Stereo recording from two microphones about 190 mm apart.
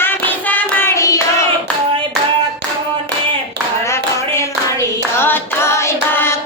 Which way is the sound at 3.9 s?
15° left (ahead or behind).